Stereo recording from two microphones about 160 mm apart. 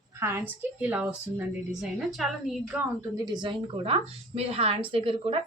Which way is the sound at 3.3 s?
30° right (ahead or behind).